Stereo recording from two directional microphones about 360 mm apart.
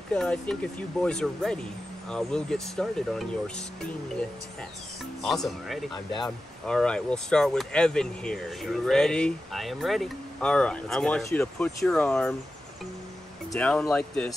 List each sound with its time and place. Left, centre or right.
0.1 s speech: centre
5.2 s speech: centre
13.5 s speech: centre